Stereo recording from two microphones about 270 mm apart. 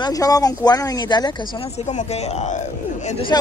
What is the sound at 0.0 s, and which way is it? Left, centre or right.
Speech, centre.